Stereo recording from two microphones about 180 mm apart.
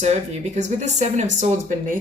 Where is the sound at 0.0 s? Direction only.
40° right (ahead or behind).